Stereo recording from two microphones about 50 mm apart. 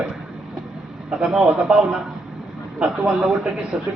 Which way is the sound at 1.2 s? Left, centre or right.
Centre.